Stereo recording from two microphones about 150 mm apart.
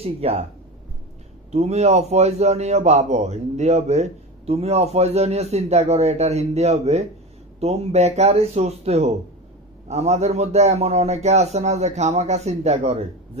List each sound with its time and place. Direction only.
0.0 s speech: 40° right (ahead or behind)
1.5 s a man's voice: 45° right (ahead or behind)